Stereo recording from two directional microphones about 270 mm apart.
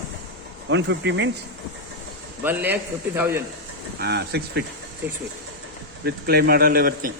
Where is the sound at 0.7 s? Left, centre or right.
Right.